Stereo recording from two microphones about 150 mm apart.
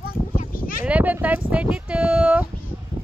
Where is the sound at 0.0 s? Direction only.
75° left (ahead or behind).